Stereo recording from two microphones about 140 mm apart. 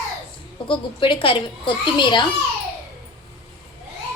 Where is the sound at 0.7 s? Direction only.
35° left (ahead or behind).